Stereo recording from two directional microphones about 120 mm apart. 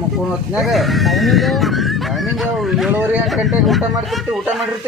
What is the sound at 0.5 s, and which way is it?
Speech, centre (ahead or behind).